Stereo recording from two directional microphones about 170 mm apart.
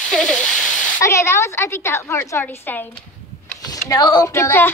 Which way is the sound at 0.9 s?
15° left (ahead or behind).